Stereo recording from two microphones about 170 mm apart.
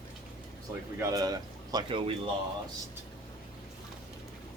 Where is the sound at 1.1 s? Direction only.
20° right (ahead or behind).